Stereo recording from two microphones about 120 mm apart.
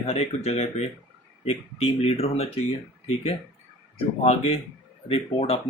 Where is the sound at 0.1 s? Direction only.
65° left (ahead or behind).